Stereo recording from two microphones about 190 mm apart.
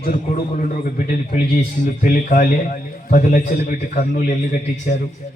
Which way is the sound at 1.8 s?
45° left (ahead or behind).